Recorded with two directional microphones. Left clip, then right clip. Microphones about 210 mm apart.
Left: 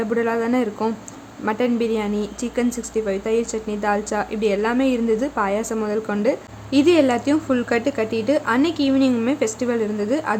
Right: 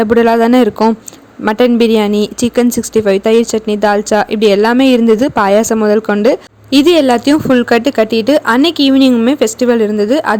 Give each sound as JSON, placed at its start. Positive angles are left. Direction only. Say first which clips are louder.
{"t": 0.0, "sound": "a woman's voice", "louder": "right 12 dB", "side_deg": -45}